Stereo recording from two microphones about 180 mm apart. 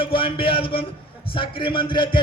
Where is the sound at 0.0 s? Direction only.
30° left (ahead or behind).